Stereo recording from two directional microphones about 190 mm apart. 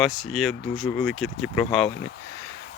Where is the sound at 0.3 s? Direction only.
Centre (ahead or behind).